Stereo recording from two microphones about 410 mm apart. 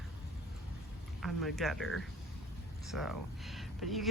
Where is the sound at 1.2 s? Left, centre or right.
Centre.